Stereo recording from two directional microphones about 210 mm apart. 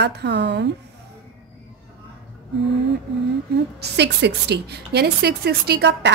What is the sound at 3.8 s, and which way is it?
A woman's voice, 55° right (ahead or behind).